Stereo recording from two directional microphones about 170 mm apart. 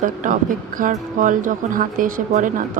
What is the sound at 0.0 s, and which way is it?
Speech, 50° right (ahead or behind).